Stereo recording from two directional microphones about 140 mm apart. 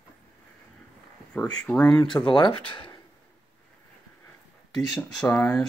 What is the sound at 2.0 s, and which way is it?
Speech, 35° left (ahead or behind).